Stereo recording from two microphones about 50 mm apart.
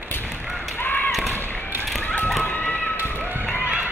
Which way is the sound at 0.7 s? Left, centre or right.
Left.